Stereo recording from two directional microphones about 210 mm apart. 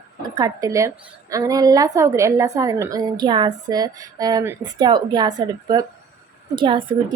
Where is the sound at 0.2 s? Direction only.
20° right (ahead or behind).